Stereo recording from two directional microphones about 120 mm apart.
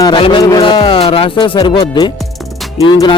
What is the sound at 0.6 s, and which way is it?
Speech, 45° left (ahead or behind).